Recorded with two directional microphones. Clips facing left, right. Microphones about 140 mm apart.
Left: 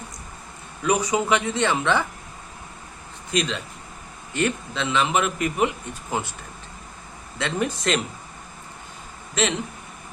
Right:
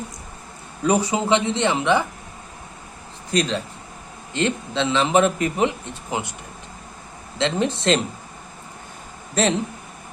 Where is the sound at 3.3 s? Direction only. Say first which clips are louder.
Right 3 dB; 35° right (ahead or behind).